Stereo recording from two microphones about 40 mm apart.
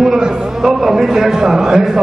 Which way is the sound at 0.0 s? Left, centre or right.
Centre.